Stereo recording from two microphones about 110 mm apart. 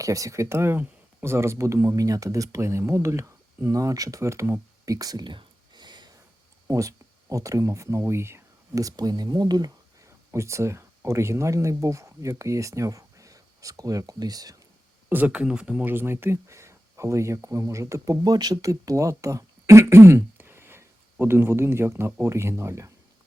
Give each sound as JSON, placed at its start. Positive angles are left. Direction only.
{"t": 0.0, "sound": "speech", "side_deg": -30}
{"t": 4.9, "sound": "a sound", "side_deg": -35}
{"t": 6.7, "sound": "speech", "side_deg": -30}
{"t": 15.1, "sound": "speech", "side_deg": -15}